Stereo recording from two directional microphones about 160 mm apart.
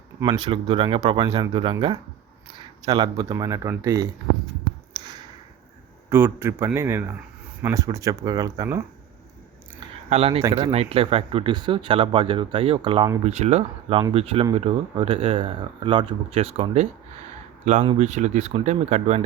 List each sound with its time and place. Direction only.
0.2 s speech: 25° right (ahead or behind)
6.1 s a man's voice: 15° right (ahead or behind)
10.1 s speech: 40° right (ahead or behind)
10.4 s speech: 25° right (ahead or behind)
10.7 s speech: 40° right (ahead or behind)
13.2 s speech: 45° right (ahead or behind)
18.0 s speech: 45° right (ahead or behind)